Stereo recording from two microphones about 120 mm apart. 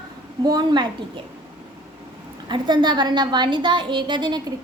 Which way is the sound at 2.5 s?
40° right (ahead or behind).